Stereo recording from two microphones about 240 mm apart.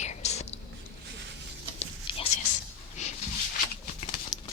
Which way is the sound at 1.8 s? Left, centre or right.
Left.